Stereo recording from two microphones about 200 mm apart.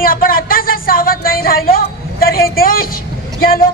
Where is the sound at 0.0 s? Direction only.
45° left (ahead or behind).